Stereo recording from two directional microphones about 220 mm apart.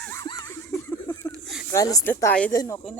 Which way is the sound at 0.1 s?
15° left (ahead or behind).